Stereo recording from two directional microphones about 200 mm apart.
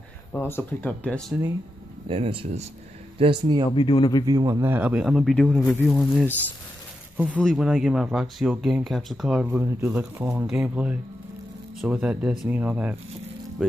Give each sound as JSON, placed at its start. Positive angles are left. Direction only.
{"t": 0.3, "sound": "speech", "side_deg": 10}
{"t": 2.0, "sound": "speech", "side_deg": -30}
{"t": 3.7, "sound": "speech", "side_deg": 25}
{"t": 4.3, "sound": "speech", "side_deg": -20}
{"t": 7.3, "sound": "speech", "side_deg": 0}